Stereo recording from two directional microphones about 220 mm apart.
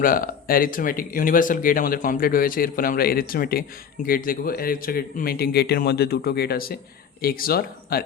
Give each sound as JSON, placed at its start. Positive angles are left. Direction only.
{"t": 0.0, "sound": "speech", "side_deg": 40}